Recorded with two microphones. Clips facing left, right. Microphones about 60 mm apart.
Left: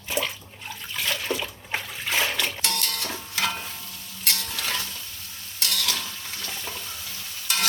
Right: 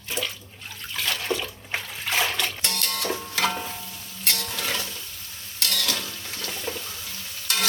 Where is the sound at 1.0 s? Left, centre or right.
Centre.